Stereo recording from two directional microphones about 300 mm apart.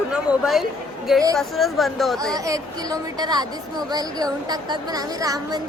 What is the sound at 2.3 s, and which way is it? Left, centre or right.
A woman's voice, centre.